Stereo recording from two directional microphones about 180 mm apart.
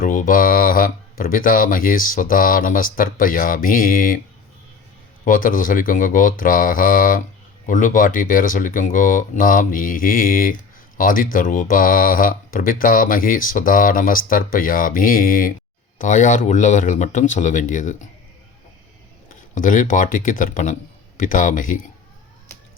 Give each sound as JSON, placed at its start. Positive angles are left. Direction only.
{"t": 0.0, "sound": "speech", "side_deg": 45}
{"t": 5.2, "sound": "speech", "side_deg": 50}
{"t": 19.5, "sound": "speech", "side_deg": 45}